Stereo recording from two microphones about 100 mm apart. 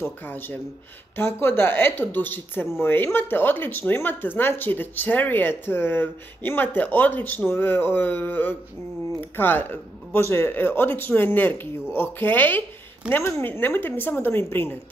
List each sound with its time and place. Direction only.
0.0 s speech: 20° left (ahead or behind)